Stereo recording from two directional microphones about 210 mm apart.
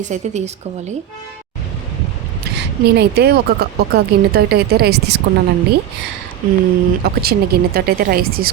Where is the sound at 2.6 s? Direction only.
50° right (ahead or behind).